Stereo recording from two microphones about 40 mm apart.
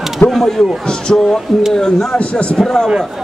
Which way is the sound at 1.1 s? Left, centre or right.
Left.